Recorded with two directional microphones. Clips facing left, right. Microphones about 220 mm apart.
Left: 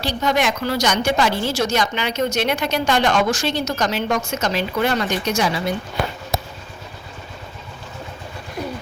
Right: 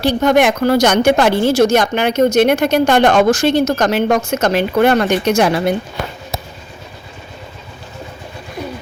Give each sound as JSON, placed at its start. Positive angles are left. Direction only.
{"t": 0.0, "sound": "a woman's voice", "side_deg": -50}